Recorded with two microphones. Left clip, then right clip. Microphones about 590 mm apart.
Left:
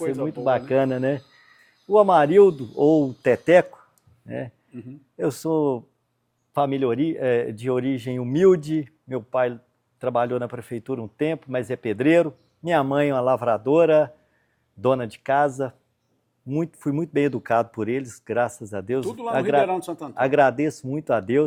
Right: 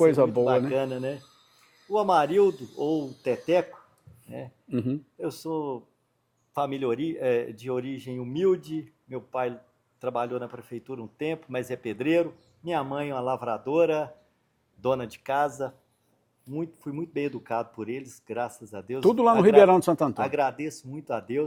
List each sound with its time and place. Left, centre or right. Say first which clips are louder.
0.0 s speech: right 7 dB; right
0.4 s speech: left 4 dB; left
4.7 s speech: right 11 dB; right
5.1 s speech: left 12 dB; left
19.0 s speech: right 10 dB; right
20.1 s speech: left 8 dB; left